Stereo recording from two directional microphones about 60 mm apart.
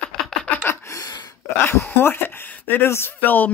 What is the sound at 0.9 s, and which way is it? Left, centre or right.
Gasp, left.